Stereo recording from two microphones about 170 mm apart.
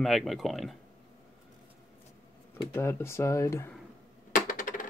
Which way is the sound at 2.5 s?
15° left (ahead or behind).